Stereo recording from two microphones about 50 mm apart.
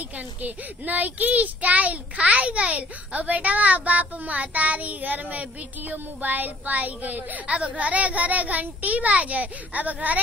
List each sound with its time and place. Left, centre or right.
0.4 s a child's voice: right